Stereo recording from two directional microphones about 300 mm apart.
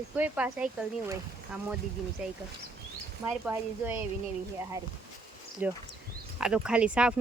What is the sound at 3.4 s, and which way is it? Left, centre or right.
Speech, centre.